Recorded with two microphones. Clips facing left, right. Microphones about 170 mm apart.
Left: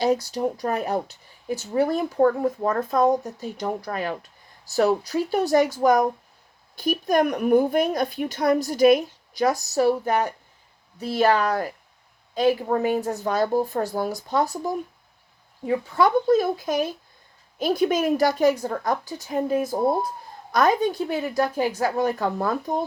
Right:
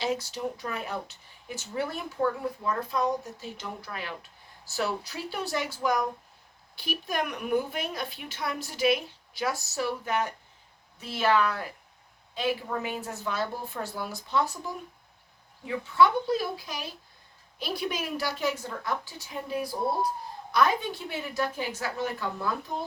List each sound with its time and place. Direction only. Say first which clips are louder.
0.3 s a woman's voice: left 9 dB; 40° left (ahead or behind)